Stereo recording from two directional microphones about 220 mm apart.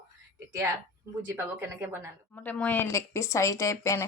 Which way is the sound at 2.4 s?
5° left (ahead or behind).